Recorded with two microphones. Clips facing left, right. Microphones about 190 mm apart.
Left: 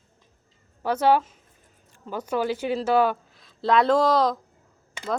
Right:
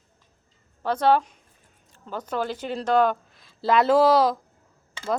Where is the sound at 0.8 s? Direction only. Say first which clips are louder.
Even; 10° left (ahead or behind).